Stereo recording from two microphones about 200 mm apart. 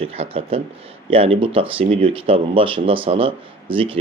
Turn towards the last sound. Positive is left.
turn(degrees=-25)  # may be behind; listen again after turning